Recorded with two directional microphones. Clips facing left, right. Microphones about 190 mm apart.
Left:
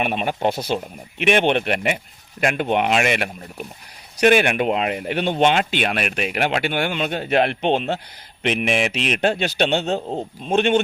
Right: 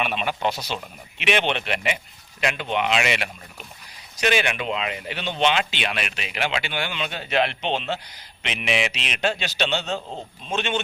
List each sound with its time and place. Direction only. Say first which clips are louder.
0.0 s speech: left 4 dB; 50° left (ahead or behind)